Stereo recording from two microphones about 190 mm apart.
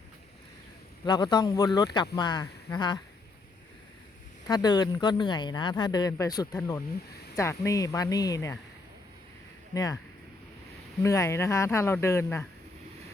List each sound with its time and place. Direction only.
1.0 s speech: 20° left (ahead or behind)
4.4 s speech: 20° left (ahead or behind)
9.7 s speech: 20° left (ahead or behind)
11.0 s speech: 15° left (ahead or behind)